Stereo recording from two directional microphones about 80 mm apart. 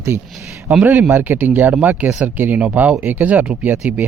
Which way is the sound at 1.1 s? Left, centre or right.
Right.